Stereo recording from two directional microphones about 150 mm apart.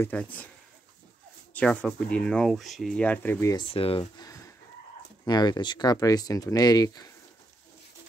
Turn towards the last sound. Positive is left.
turn(degrees=25)  # may be behind; listen again after turning